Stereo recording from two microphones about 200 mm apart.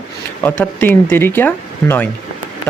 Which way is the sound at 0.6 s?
10° left (ahead or behind).